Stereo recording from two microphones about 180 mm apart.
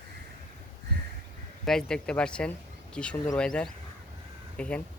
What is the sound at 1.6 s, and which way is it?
Speech, 5° left (ahead or behind).